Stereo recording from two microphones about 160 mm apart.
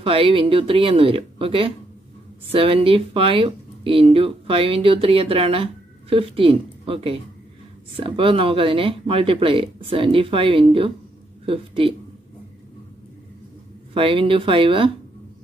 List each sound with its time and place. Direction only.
0.0 s speech: 35° right (ahead or behind)
13.9 s speech: 35° right (ahead or behind)